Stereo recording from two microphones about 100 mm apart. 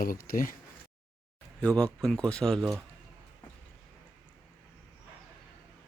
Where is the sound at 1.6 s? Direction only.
10° left (ahead or behind).